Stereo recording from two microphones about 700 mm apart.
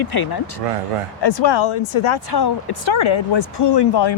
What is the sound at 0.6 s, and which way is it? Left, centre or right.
Speech, right.